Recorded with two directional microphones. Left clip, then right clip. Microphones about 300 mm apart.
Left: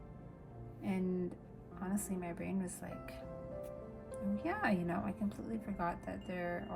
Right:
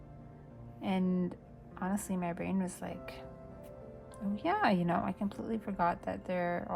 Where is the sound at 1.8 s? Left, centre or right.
Centre.